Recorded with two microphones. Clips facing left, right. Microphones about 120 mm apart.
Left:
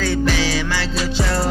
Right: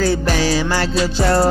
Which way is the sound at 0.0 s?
40° right (ahead or behind).